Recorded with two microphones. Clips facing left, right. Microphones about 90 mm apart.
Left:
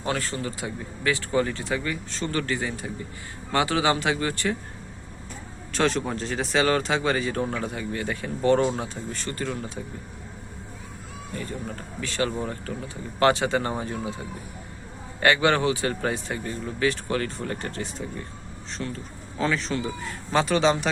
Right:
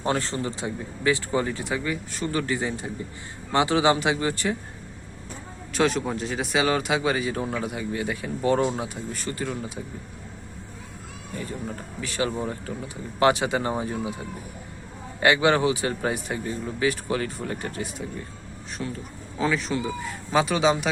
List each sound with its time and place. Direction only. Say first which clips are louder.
0.0 s speech: right 2 dB; 25° right (ahead or behind)
5.7 s speech: right 1 dB; 5° right (ahead or behind)
11.3 s speech: right 1 dB; 15° right (ahead or behind)
15.2 s speech: right 1 dB; 15° right (ahead or behind)